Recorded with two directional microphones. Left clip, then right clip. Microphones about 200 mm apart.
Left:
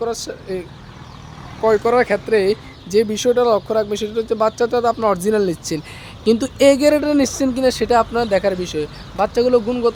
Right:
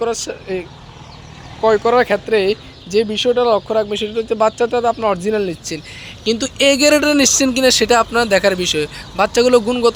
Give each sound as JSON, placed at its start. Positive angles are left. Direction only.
{"t": 0.3, "sound": "speech", "side_deg": -5}
{"t": 1.6, "sound": "speech", "side_deg": 5}
{"t": 5.3, "sound": "speech", "side_deg": 15}